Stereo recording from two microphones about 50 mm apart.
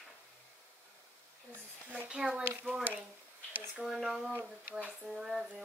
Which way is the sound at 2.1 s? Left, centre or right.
Centre.